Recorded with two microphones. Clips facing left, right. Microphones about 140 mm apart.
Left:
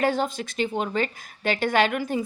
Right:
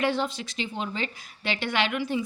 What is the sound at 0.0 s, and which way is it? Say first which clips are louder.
A woman's voice: left 3 dB; 45° left (ahead or behind).